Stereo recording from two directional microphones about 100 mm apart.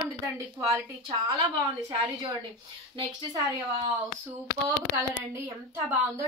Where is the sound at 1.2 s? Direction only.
35° right (ahead or behind).